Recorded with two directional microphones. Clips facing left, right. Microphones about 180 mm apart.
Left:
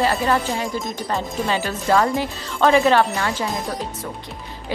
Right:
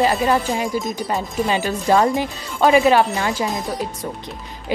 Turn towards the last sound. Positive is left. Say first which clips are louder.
# right 2 dB
turn(degrees=-20)  # may be behind; listen again after turning